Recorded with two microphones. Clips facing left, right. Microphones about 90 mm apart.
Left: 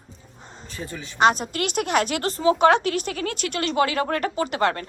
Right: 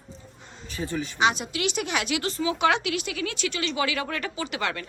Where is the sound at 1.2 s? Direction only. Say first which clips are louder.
Left 5 dB; 45° left (ahead or behind).